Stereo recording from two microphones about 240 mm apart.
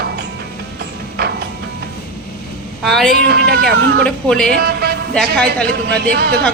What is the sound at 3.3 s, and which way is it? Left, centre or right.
Speech, right.